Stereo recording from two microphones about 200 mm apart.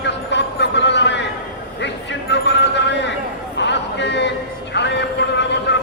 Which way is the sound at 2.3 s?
60° left (ahead or behind).